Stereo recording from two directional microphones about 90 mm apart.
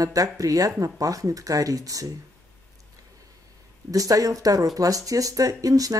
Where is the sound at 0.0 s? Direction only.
40° right (ahead or behind).